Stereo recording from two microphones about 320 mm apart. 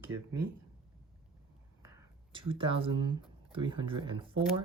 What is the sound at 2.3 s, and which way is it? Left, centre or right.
Speech, centre.